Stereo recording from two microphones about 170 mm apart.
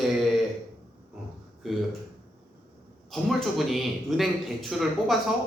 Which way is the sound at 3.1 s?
Centre (ahead or behind).